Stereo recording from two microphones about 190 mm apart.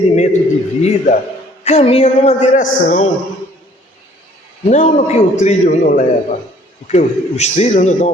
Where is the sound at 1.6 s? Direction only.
35° left (ahead or behind).